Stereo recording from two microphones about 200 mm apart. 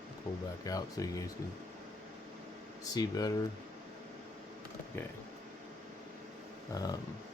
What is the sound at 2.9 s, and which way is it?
Speech, 20° left (ahead or behind).